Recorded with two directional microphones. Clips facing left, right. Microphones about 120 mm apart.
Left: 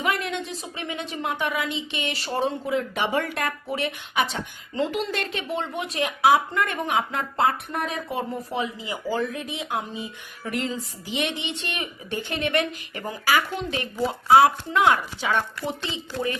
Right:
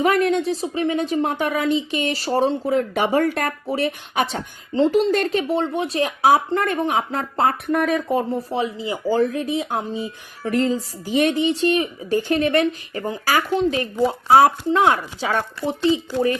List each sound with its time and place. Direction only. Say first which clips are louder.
0.0 s speech: right 9 dB; 40° right (ahead or behind)